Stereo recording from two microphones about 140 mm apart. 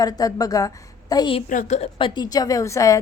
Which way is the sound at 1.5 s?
60° left (ahead or behind).